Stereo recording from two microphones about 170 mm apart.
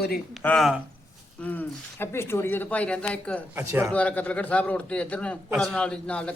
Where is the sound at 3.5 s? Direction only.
15° right (ahead or behind).